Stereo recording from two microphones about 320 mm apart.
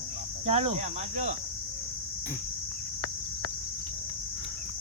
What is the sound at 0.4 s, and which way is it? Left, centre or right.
Speech, centre.